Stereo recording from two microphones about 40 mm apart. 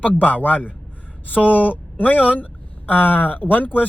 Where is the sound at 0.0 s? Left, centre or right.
Left.